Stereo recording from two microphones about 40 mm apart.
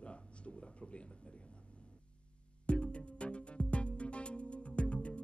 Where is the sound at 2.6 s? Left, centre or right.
Left.